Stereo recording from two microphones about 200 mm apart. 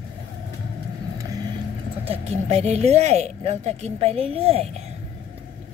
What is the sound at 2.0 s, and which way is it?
Speech, 35° right (ahead or behind).